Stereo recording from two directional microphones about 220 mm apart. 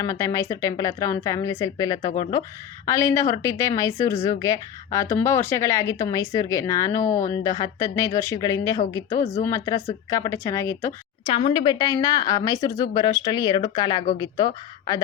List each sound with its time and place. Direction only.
0.0 s a woman's voice: 15° left (ahead or behind)